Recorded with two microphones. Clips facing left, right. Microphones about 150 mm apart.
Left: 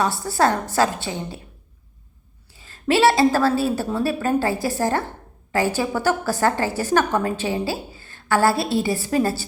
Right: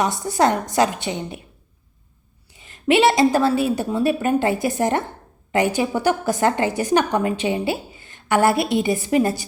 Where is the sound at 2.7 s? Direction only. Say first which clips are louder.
Right 1 dB; 20° right (ahead or behind).